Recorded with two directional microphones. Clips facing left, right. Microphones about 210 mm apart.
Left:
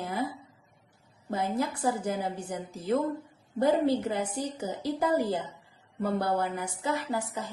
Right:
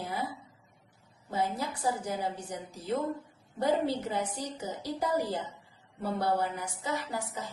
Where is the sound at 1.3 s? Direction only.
50° left (ahead or behind).